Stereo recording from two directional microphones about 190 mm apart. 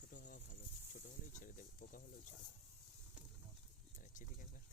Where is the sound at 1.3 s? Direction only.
45° left (ahead or behind).